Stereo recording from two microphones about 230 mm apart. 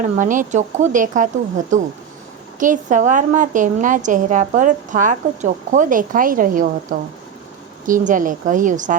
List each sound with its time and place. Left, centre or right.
0.0 s a woman's voice: right